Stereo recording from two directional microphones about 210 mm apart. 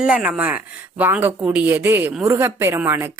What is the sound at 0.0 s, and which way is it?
Speech, 5° right (ahead or behind).